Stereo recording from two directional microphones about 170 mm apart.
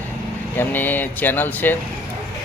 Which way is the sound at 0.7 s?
10° left (ahead or behind).